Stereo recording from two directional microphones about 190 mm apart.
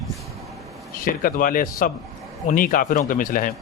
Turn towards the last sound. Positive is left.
turn(degrees=45)  # may be behind; listen again after turning